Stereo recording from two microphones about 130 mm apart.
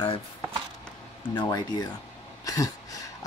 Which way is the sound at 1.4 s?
30° left (ahead or behind).